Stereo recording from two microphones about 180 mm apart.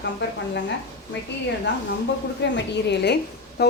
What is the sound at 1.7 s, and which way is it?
A woman's voice, 75° left (ahead or behind).